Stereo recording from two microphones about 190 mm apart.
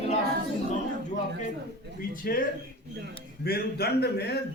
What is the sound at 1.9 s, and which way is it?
A man's voice, 50° left (ahead or behind).